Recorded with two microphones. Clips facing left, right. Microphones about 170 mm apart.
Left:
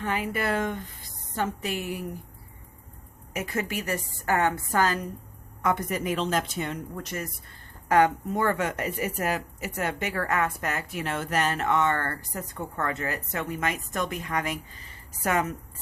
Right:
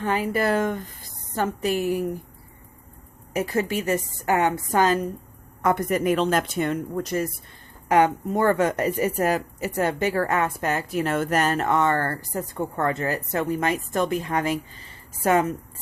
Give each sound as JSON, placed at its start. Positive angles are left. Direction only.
{"t": 0.0, "sound": "a woman's voice", "side_deg": -35}
{"t": 3.3, "sound": "a woman's voice", "side_deg": -35}
{"t": 5.6, "sound": "speech", "side_deg": -50}
{"t": 7.0, "sound": "a woman's voice", "side_deg": -35}
{"t": 7.9, "sound": "speech", "side_deg": -20}
{"t": 8.3, "sound": "a woman's voice", "side_deg": -35}